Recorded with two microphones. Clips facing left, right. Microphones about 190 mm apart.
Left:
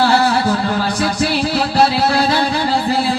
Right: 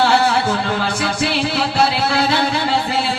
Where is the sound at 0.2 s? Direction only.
35° left (ahead or behind).